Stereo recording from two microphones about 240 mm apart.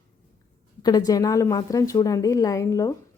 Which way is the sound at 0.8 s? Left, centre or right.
Centre.